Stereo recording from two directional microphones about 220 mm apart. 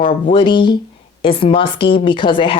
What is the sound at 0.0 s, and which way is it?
Speech, 25° left (ahead or behind).